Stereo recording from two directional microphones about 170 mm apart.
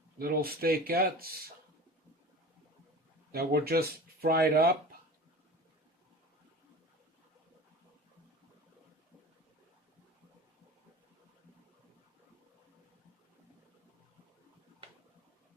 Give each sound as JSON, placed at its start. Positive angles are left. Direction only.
{"t": 0.2, "sound": "speech", "side_deg": -60}
{"t": 3.3, "sound": "speech", "side_deg": -65}